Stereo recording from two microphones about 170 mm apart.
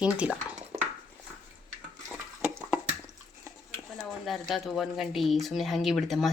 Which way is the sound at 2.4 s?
10° right (ahead or behind).